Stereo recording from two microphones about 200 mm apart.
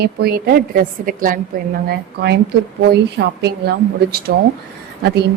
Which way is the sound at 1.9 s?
55° right (ahead or behind).